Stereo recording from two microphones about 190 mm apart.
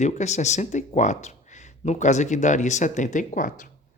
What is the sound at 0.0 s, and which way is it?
Speech, 40° left (ahead or behind).